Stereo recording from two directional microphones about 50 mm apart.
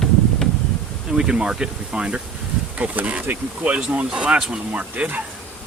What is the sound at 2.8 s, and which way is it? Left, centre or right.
Speech, right.